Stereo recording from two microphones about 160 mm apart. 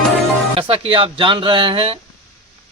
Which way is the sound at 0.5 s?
35° right (ahead or behind).